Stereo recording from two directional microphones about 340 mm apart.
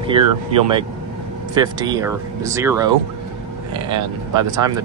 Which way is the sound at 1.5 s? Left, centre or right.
Centre.